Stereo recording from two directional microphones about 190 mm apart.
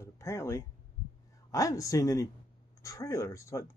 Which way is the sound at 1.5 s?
15° left (ahead or behind).